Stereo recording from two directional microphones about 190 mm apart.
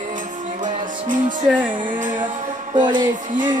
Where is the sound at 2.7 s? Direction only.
25° right (ahead or behind).